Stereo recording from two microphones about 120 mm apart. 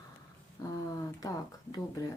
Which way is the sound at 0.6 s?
30° left (ahead or behind).